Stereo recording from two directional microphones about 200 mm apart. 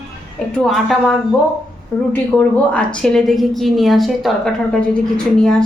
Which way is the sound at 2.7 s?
5° left (ahead or behind).